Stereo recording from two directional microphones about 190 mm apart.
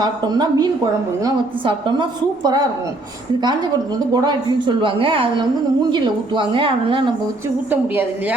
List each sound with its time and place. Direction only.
0.0 s speech: 20° right (ahead or behind)